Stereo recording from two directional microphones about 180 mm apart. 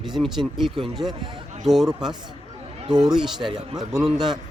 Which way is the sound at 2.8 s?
20° right (ahead or behind).